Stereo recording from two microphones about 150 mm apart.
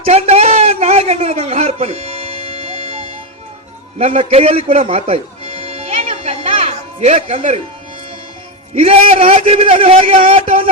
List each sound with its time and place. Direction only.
0.0 s a sound: 45° right (ahead or behind)
3.9 s music: 45° right (ahead or behind)
8.7 s a man's voice: 45° right (ahead or behind)